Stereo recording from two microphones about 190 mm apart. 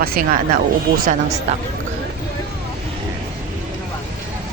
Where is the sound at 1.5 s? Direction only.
35° right (ahead or behind).